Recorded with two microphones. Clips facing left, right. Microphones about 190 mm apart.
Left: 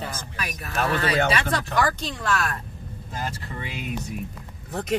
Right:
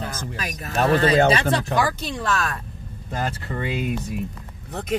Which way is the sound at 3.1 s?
55° right (ahead or behind).